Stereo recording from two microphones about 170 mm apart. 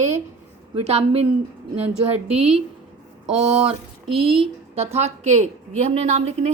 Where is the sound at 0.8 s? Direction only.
35° right (ahead or behind).